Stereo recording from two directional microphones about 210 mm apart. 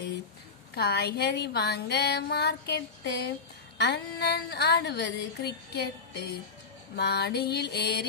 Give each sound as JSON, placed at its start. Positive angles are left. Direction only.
{"t": 0.7, "sound": "speech", "side_deg": 50}